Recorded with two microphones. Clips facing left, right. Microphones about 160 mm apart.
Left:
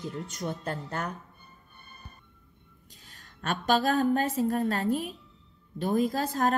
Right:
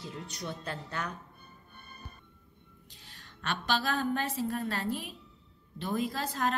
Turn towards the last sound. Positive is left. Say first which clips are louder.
# left 5 dB
turn(degrees=45)  # may be behind; listen again after turning